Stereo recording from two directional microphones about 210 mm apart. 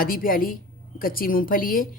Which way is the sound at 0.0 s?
40° left (ahead or behind).